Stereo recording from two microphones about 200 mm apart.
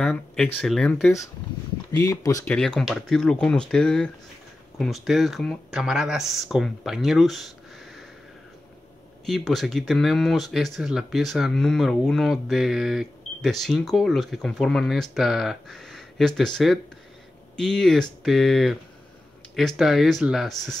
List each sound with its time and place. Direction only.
0.0 s speech: 5° left (ahead or behind)
1.9 s speech: 15° left (ahead or behind)
2.5 s speech: 5° left (ahead or behind)
9.2 s speech: centre (ahead or behind)